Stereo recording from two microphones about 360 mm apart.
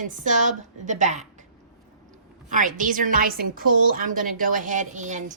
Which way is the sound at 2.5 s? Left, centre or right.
Right.